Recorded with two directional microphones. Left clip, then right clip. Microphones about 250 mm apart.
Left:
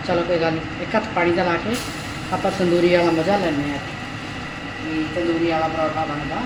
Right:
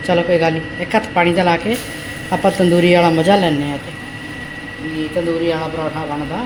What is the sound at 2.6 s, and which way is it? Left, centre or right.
Speech, right.